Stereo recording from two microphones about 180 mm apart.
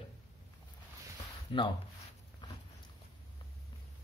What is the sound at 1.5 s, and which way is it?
Speech, 25° left (ahead or behind).